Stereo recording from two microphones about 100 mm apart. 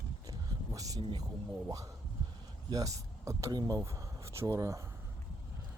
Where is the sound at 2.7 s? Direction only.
35° right (ahead or behind).